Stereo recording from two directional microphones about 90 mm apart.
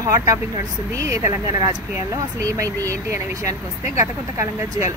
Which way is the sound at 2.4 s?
40° right (ahead or behind).